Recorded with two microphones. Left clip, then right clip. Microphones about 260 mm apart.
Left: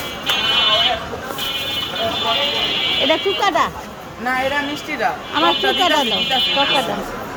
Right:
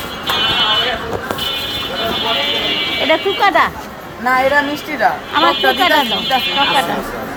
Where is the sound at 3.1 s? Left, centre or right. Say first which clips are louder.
Right 4 dB; centre.